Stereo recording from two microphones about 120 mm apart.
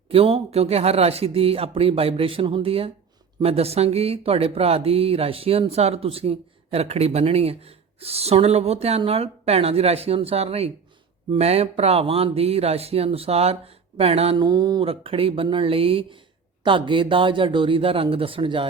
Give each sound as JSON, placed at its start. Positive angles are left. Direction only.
{"t": 0.1, "sound": "speech", "side_deg": -50}
{"t": 14.3, "sound": "mantra", "side_deg": -35}
{"t": 14.8, "sound": "speech", "side_deg": -50}